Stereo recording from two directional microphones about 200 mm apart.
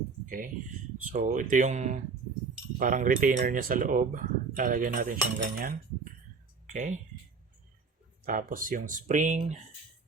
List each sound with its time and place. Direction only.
0.3 s speech: 45° right (ahead or behind)
8.2 s speech: 45° right (ahead or behind)